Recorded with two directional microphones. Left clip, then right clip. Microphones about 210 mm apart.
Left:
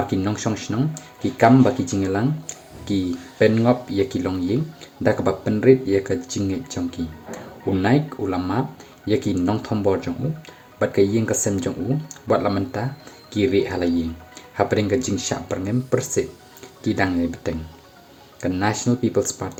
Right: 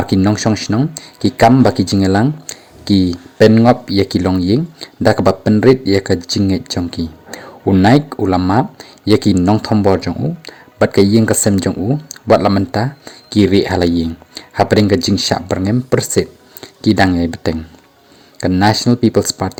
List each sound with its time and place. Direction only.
0.1 s speech: 40° right (ahead or behind)